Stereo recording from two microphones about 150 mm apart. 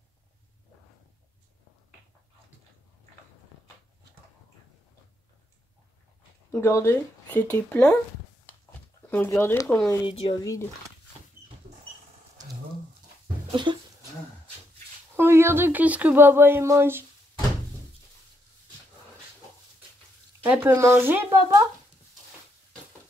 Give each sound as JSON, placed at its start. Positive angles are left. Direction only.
{"t": 6.5, "sound": "speech", "side_deg": 20}
{"t": 9.1, "sound": "speech", "side_deg": 15}
{"t": 10.0, "sound": "speech", "side_deg": 40}
{"t": 10.4, "sound": "speech", "side_deg": 20}
{"t": 13.5, "sound": "a sound", "side_deg": -30}
{"t": 15.1, "sound": "speech", "side_deg": -15}
{"t": 20.5, "sound": "speech", "side_deg": -15}